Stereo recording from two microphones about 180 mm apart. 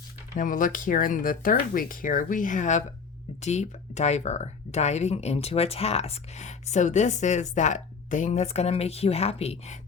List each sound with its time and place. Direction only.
0.3 s speech: 50° left (ahead or behind)